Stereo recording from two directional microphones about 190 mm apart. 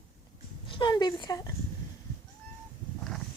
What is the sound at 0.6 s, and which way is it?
Speech, 25° left (ahead or behind).